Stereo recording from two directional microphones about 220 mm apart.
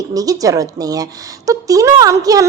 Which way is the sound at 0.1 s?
15° right (ahead or behind).